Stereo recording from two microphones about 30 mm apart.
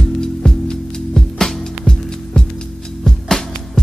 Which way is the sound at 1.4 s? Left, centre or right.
Centre.